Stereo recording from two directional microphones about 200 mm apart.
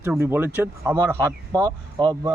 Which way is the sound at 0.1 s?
10° right (ahead or behind).